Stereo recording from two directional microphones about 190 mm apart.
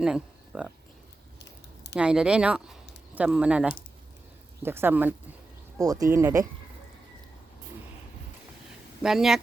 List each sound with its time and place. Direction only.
0.0 s speech: 5° right (ahead or behind)
1.5 s a sound: 65° left (ahead or behind)
2.0 s speech: 5° right (ahead or behind)
9.0 s speech: centre (ahead or behind)